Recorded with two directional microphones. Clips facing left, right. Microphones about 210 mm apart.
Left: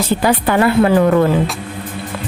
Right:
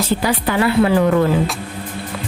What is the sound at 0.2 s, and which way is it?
Speech, 55° left (ahead or behind).